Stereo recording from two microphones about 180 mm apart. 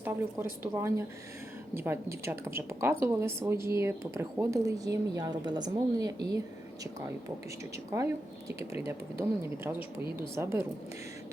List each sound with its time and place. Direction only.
0.6 s speech: 15° right (ahead or behind)
7.9 s speech: 15° right (ahead or behind)